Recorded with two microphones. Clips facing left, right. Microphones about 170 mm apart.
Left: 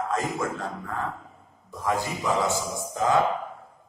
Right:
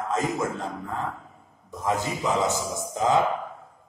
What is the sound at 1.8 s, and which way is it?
A man's voice, 20° right (ahead or behind).